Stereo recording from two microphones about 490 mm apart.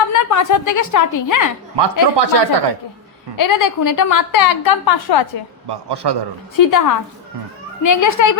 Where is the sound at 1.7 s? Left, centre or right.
Right.